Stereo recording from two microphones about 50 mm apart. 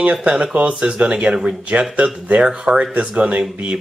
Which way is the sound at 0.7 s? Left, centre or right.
Centre.